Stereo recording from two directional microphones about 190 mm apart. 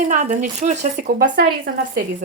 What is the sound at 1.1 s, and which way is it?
Speech, 65° right (ahead or behind).